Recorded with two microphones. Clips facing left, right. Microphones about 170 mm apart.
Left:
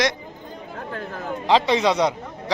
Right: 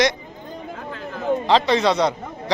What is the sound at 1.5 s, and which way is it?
Speech, 10° left (ahead or behind).